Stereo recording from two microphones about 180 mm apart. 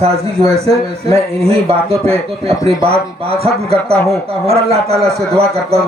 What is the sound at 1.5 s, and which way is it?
Speech, 35° right (ahead or behind).